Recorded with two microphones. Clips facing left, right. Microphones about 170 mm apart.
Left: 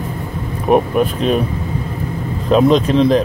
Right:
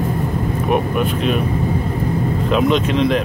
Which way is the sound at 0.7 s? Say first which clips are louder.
Left 6 dB; 35° left (ahead or behind).